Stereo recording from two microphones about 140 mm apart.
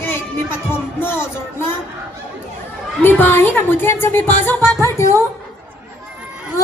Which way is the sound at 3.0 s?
15° left (ahead or behind).